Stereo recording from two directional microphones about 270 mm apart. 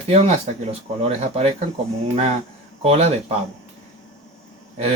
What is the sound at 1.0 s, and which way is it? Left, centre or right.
Speech, right.